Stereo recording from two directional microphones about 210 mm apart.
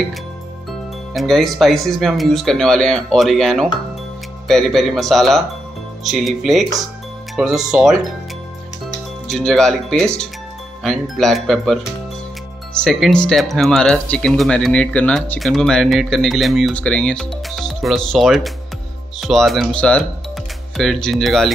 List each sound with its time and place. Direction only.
1.1 s speech: centre (ahead or behind)
9.3 s speech: centre (ahead or behind)